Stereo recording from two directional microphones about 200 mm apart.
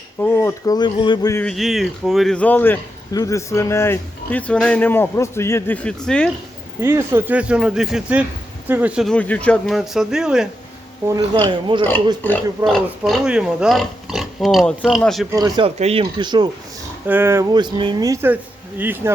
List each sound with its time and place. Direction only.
0.2 s a man's voice: 10° left (ahead or behind)
1.5 s a man's voice: centre (ahead or behind)
6.8 s speech: 10° right (ahead or behind)
11.4 s speech: 25° right (ahead or behind)
12.2 s speech: 5° left (ahead or behind)
15.3 s speech: 20° right (ahead or behind)
17.1 s speech: 10° right (ahead or behind)
17.5 s speech: 20° right (ahead or behind)